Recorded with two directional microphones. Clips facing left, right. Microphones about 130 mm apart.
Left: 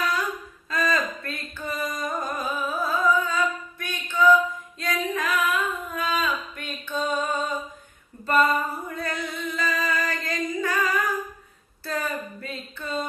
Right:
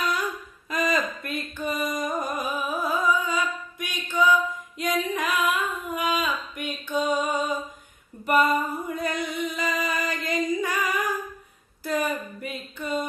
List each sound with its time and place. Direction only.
0.7 s music: 20° right (ahead or behind)
4.8 s female singing: 15° right (ahead or behind)
8.2 s a sound: 15° right (ahead or behind)